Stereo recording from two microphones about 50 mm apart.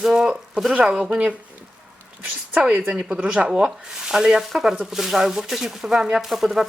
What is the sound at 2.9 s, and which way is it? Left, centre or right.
Speech, right.